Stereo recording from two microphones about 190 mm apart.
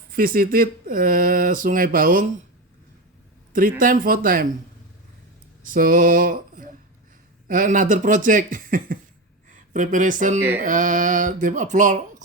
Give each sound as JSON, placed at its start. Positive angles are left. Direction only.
{"t": 0.1, "sound": "speech", "side_deg": -50}
{"t": 3.5, "sound": "speech", "side_deg": -45}
{"t": 5.6, "sound": "a sound", "side_deg": -45}
{"t": 7.4, "sound": "speech", "side_deg": -45}